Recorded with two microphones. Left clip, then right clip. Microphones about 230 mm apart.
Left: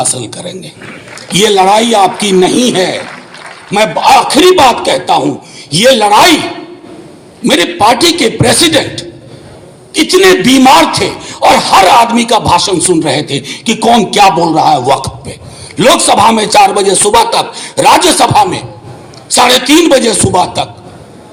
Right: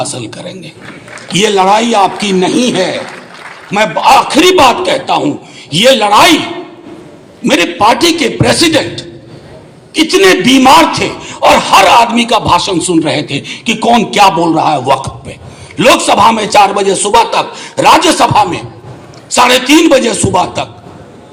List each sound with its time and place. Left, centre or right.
0.0 s a man's voice: left
7.4 s a man's voice: left